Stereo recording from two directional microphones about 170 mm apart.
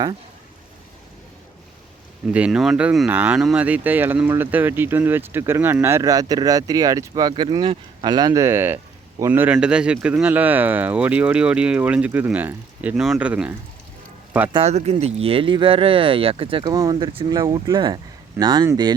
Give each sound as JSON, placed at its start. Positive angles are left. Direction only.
{"t": 2.3, "sound": "speech", "side_deg": -5}
{"t": 14.5, "sound": "speech", "side_deg": -40}